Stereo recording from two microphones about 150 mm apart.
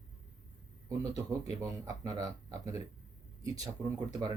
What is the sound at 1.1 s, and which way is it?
Speech, 25° right (ahead or behind).